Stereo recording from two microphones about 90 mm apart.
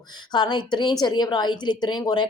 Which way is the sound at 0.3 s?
55° left (ahead or behind).